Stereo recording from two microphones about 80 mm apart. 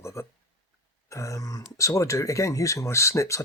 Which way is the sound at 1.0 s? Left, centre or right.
Left.